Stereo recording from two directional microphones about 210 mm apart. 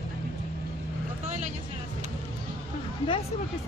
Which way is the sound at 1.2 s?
35° right (ahead or behind).